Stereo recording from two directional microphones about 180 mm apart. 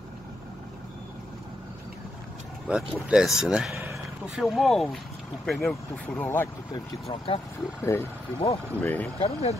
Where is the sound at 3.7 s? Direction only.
15° right (ahead or behind).